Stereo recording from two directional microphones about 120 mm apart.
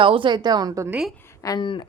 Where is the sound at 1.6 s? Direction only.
40° left (ahead or behind).